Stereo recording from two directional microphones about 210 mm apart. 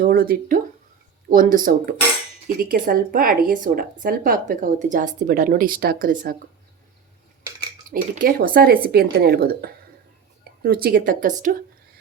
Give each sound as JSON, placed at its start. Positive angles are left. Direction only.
{"t": 0.0, "sound": "a woman's voice", "side_deg": -45}
{"t": 7.9, "sound": "a woman's voice", "side_deg": -40}